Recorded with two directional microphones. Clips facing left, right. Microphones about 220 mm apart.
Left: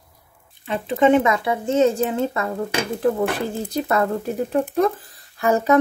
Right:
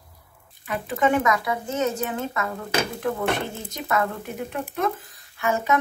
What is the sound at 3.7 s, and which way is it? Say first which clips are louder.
A woman's voice: left 4 dB; 35° left (ahead or behind).